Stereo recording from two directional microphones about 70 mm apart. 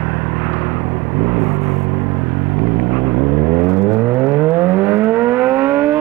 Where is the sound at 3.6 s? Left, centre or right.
Right.